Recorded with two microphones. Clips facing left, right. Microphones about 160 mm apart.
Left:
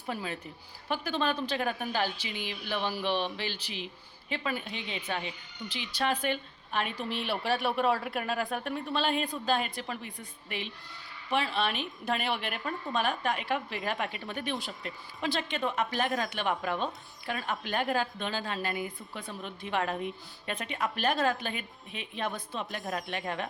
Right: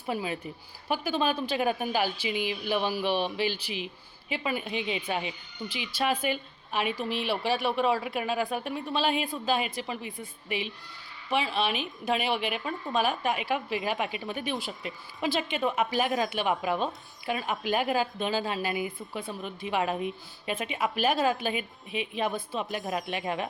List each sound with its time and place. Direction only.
0.0 s a woman's voice: 10° right (ahead or behind)
22.9 s speech: 20° right (ahead or behind)